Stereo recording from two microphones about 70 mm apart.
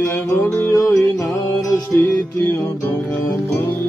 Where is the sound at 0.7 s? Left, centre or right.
Left.